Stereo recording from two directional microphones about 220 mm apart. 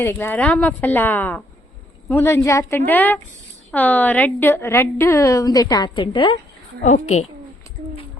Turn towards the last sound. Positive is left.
turn(degrees=30)  # may be behind; listen again after turning